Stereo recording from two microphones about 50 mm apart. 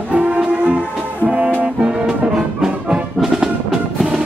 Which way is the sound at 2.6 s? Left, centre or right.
Centre.